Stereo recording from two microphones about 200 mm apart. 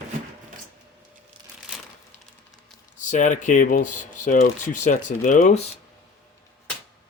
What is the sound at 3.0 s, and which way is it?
Speech, 40° left (ahead or behind).